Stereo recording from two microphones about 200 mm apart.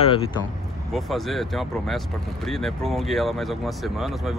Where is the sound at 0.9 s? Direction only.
Centre (ahead or behind).